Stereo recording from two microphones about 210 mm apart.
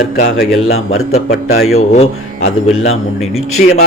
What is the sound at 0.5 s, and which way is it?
A man's voice, 75° left (ahead or behind).